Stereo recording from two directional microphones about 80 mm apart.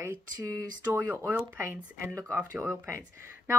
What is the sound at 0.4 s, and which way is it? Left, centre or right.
Speech, right.